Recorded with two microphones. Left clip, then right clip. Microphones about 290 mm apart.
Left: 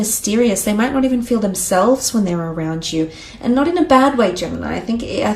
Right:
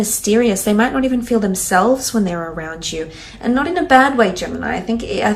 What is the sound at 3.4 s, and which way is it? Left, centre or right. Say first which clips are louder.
A woman's voice: left 1 dB; centre.